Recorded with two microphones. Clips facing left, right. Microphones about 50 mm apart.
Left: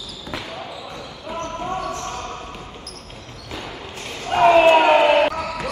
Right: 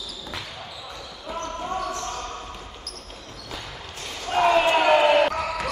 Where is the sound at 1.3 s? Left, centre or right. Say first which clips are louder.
Left 3 dB; left.